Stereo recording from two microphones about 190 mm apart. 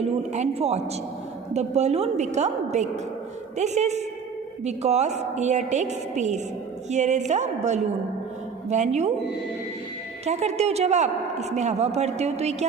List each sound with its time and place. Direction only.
0.0 s a man's voice: 35° right (ahead or behind)
10.2 s a man's voice: 35° right (ahead or behind)